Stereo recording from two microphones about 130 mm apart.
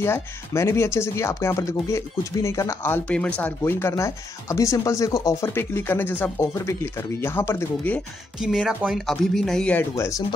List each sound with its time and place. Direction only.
0.0 s speech: 20° left (ahead or behind)
8.4 s speech: 5° right (ahead or behind)
9.9 s speech: 25° left (ahead or behind)